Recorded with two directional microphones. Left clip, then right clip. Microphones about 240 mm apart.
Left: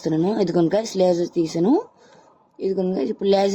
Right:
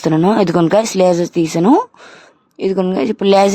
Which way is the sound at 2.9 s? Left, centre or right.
Right.